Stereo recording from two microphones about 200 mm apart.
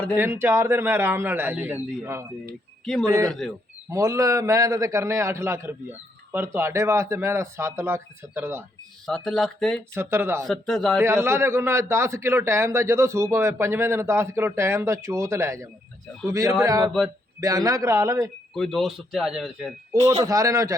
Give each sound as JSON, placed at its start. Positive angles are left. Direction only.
{"t": 0.2, "sound": "a man's voice", "side_deg": -10}
{"t": 2.8, "sound": "speech", "side_deg": 0}
{"t": 3.8, "sound": "a man's voice", "side_deg": -15}
{"t": 9.0, "sound": "speech", "side_deg": 0}
{"t": 9.9, "sound": "a man's voice", "side_deg": -10}
{"t": 10.4, "sound": "speech", "side_deg": 0}
{"t": 11.0, "sound": "a man's voice", "side_deg": -15}
{"t": 18.5, "sound": "speech", "side_deg": 0}
{"t": 20.2, "sound": "a man's voice", "side_deg": -15}